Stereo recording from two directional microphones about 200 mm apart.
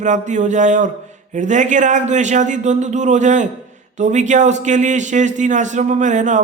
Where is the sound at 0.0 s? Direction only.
40° right (ahead or behind).